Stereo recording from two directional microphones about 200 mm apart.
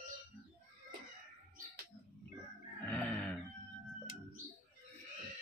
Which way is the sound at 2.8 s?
5° left (ahead or behind).